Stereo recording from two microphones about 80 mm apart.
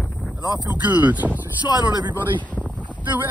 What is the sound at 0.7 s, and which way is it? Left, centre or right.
Speech, right.